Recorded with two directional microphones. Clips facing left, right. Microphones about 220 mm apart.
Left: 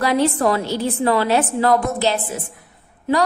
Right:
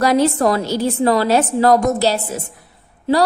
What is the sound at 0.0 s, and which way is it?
A woman's voice, 40° right (ahead or behind).